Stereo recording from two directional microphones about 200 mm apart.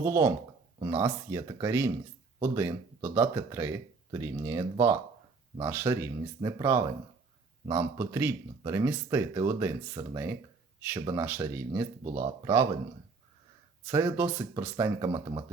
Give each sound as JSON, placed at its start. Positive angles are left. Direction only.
{"t": 0.0, "sound": "speech", "side_deg": -15}
{"t": 13.8, "sound": "speech", "side_deg": -10}